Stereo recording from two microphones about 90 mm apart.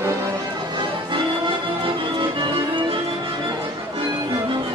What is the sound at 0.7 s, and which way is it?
Music, 60° right (ahead or behind).